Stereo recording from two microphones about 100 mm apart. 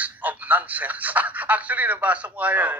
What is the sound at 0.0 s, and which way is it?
A man's voice, 15° right (ahead or behind).